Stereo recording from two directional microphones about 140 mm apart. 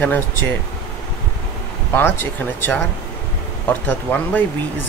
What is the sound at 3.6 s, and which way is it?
Speech, 10° left (ahead or behind).